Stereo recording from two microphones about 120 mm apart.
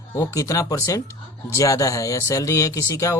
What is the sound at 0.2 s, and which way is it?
A man's voice, 25° left (ahead or behind).